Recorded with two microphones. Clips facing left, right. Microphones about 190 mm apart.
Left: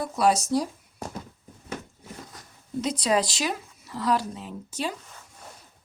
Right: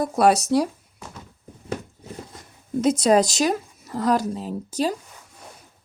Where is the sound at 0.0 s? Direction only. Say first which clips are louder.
Right 5 dB; 60° right (ahead or behind).